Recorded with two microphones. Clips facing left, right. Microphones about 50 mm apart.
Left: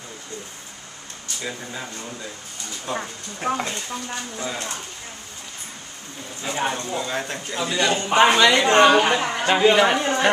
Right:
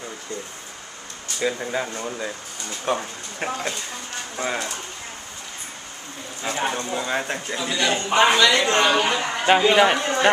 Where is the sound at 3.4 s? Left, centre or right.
Right.